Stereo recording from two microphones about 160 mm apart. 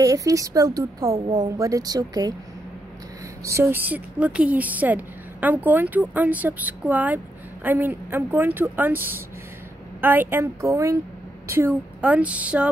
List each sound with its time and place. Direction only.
0.0 s a woman's voice: 20° right (ahead or behind)
1.1 s a woman's voice: 35° right (ahead or behind)
1.4 s a woman's voice: 20° right (ahead or behind)
3.4 s speech: 15° right (ahead or behind)